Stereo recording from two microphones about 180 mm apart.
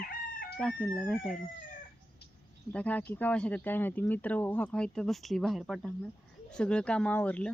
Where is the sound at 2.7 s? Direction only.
10° left (ahead or behind).